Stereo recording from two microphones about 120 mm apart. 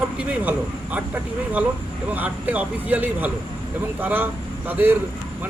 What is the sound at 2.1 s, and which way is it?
Speech, 15° right (ahead or behind).